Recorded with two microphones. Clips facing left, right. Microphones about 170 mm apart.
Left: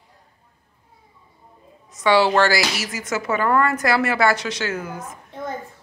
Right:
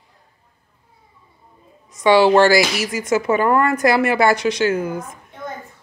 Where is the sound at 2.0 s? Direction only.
15° right (ahead or behind).